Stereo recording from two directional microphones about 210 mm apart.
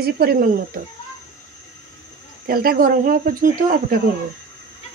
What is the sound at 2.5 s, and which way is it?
Speech, 45° right (ahead or behind).